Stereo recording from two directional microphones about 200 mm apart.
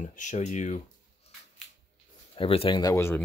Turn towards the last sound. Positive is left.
turn(degrees=15)  # may be behind; listen again after turning